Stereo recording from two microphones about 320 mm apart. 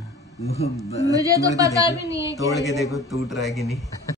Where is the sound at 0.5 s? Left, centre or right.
Centre.